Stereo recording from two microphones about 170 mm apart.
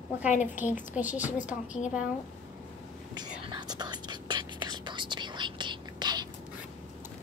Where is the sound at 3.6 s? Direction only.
25° right (ahead or behind).